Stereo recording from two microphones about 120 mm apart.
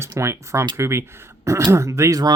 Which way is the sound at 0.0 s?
25° right (ahead or behind).